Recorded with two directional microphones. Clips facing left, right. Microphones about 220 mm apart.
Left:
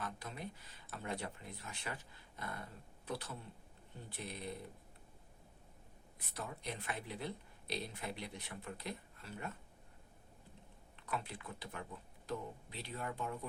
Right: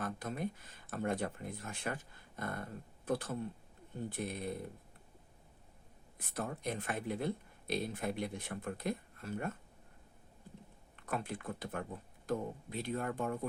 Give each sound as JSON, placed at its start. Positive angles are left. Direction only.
{"t": 0.0, "sound": "speech", "side_deg": -50}
{"t": 6.1, "sound": "speech", "side_deg": -50}
{"t": 10.9, "sound": "speech", "side_deg": -50}